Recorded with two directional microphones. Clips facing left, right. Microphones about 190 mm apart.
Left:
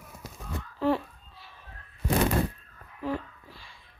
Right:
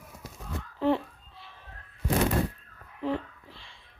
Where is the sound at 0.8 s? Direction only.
20° right (ahead or behind).